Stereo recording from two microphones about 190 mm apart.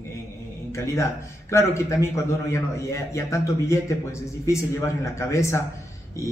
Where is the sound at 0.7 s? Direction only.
15° left (ahead or behind).